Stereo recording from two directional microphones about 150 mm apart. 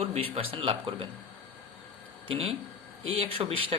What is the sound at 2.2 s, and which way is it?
Speech, 40° right (ahead or behind).